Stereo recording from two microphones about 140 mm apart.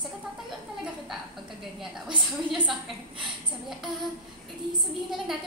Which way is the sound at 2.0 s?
Centre (ahead or behind).